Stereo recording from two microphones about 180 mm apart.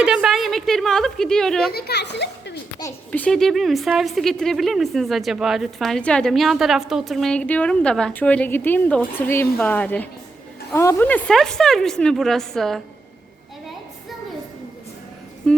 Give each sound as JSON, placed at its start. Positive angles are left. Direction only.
{"t": 0.0, "sound": "a woman's voice", "side_deg": -5}
{"t": 1.7, "sound": "a child's voice", "side_deg": 65}
{"t": 3.1, "sound": "a woman's voice", "side_deg": 5}
{"t": 15.4, "sound": "speech", "side_deg": 5}